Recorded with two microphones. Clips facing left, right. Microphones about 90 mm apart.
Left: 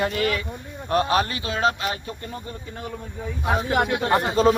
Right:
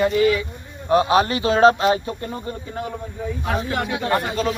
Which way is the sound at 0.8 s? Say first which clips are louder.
Right 5 dB; 10° right (ahead or behind).